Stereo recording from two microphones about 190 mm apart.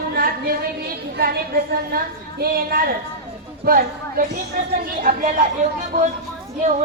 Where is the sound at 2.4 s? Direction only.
50° right (ahead or behind).